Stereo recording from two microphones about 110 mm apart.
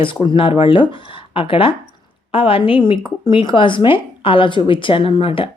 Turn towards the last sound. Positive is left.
turn(degrees=55)  # may be behind; listen again after turning